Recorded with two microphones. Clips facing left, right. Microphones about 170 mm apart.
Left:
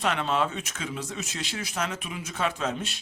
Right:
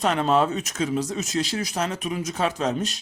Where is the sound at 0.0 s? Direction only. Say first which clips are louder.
Right 6 dB; 40° right (ahead or behind).